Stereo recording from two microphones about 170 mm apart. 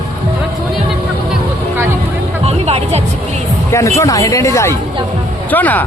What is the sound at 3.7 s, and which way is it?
A man's voice, 15° left (ahead or behind).